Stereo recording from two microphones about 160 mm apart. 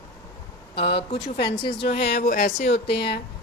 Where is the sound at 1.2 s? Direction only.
85° left; by 2.7 s 50° left (ahead or behind).